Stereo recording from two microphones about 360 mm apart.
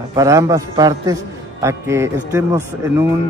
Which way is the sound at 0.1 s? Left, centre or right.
Centre.